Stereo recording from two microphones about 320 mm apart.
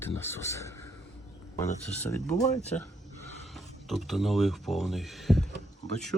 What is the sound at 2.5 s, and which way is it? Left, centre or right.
Speech, centre.